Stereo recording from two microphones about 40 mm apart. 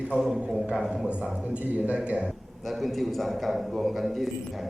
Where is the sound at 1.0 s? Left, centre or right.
Right.